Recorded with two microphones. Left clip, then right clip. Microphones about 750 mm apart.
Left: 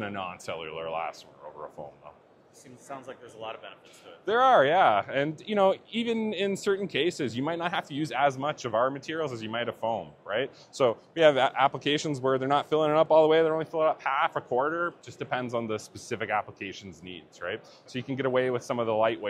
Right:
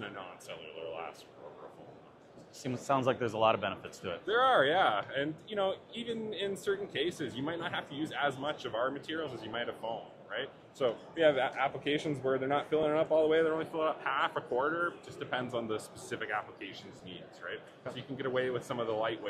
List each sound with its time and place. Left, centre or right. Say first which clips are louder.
0.0 s speech: left 9 dB; left
2.6 s speech: right 11 dB; right
4.3 s speech: left 6 dB; left